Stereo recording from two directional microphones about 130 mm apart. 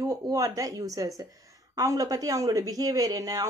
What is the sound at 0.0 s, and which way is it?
Speech, 30° right (ahead or behind).